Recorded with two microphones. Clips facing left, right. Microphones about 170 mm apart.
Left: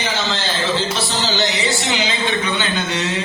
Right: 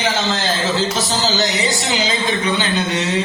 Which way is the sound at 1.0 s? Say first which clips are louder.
Right 2 dB; 40° right (ahead or behind).